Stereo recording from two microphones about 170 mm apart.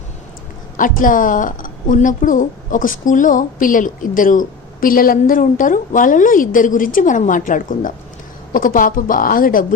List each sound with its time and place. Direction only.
0.8 s a woman's voice: 50° left (ahead or behind)